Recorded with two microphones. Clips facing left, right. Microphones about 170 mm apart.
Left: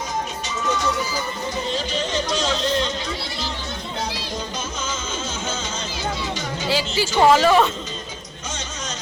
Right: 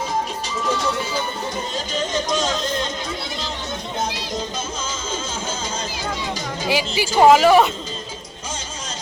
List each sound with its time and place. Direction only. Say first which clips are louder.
1.7 s speech: right 1 dB; 45° right (ahead or behind)
6.7 s speech: right 1 dB; 15° right (ahead or behind)